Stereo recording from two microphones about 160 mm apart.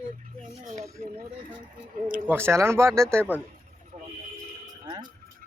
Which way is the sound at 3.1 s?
10° left (ahead or behind).